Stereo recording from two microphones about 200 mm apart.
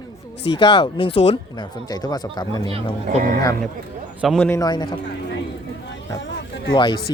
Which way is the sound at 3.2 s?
45° right (ahead or behind).